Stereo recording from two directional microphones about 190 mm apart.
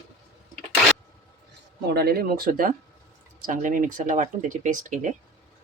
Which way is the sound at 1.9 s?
55° right (ahead or behind).